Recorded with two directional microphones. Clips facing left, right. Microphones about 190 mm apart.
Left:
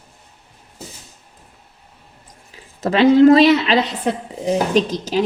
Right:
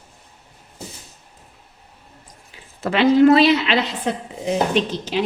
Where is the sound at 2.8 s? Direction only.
35° left (ahead or behind).